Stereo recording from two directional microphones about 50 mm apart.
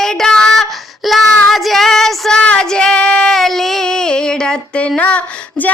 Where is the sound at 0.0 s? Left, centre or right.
Centre.